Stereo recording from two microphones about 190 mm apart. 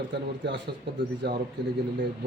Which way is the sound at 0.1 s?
60° right (ahead or behind).